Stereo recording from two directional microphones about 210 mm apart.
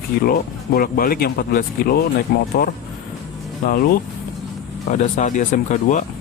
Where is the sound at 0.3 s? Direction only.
45° left (ahead or behind).